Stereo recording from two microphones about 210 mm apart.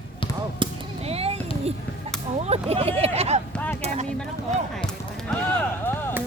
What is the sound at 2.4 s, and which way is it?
Speech, 30° right (ahead or behind).